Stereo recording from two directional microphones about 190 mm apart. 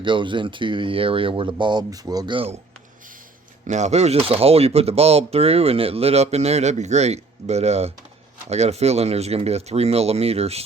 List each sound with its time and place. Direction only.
0.0 s speech: 25° right (ahead or behind)
3.7 s speech: 35° right (ahead or behind)